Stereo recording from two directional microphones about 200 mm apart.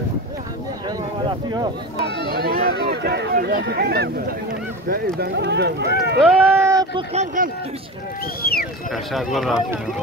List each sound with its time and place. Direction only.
0.8 s a sound: 20° right (ahead or behind)
2.2 s speech: 50° right (ahead or behind)
6.5 s a sound: 15° right (ahead or behind)
7.0 s speech: 30° right (ahead or behind)
8.4 s speech: 50° left (ahead or behind)
8.9 s speech: centre (ahead or behind)